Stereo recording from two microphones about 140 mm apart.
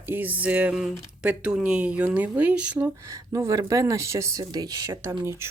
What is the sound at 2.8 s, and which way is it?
Speech, 20° right (ahead or behind).